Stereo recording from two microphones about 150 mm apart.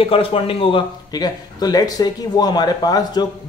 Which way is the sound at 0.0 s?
40° left (ahead or behind).